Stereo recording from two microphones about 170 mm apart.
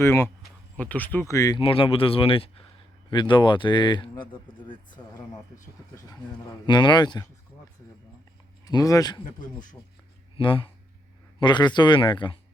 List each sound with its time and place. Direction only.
0.0 s speech: 15° left (ahead or behind)
1.6 s speech: 35° left (ahead or behind)
8.6 s speech: 20° left (ahead or behind)
9.4 s speech: 50° left (ahead or behind)
10.3 s speech: 30° left (ahead or behind)